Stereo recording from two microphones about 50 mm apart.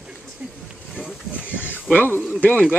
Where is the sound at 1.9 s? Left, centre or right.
Left.